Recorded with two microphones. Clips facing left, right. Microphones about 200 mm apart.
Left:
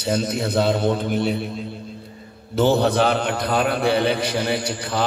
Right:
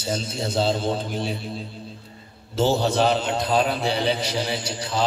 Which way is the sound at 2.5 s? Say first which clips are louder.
Left 3 dB; 60° left (ahead or behind).